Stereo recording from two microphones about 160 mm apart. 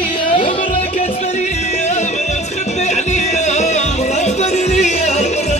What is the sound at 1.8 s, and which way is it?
Music, 45° left (ahead or behind).